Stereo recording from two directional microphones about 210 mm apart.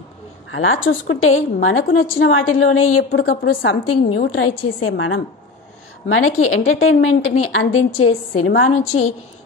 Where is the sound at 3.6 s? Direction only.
70° left (ahead or behind).